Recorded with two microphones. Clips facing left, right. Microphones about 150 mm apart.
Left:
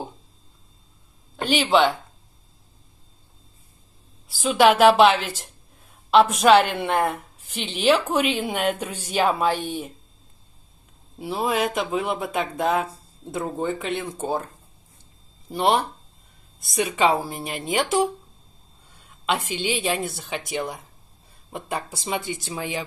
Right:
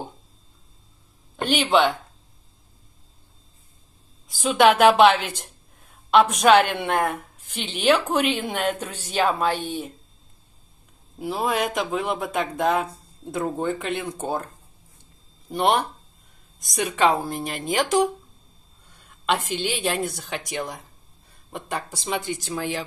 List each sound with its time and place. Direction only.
1.5 s speech: centre (ahead or behind)
4.3 s a woman's voice: centre (ahead or behind)
11.1 s speech: centre (ahead or behind)
15.5 s a woman's voice: centre (ahead or behind)
18.9 s a sound: 5° left (ahead or behind)
19.5 s a woman's voice: centre (ahead or behind)